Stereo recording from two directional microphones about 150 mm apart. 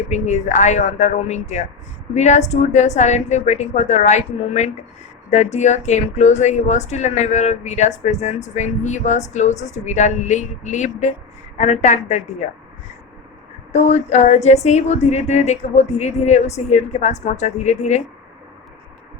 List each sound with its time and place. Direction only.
0.1 s a woman's voice: 55° left (ahead or behind)
13.7 s a woman's voice: 45° left (ahead or behind)